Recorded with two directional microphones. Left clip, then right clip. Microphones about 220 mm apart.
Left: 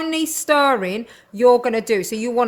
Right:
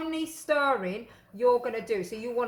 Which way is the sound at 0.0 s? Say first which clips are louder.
Left 11 dB; 50° left (ahead or behind).